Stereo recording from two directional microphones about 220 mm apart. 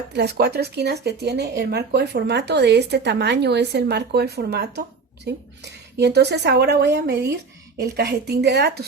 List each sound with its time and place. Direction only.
0.1 s speech: 50° right (ahead or behind)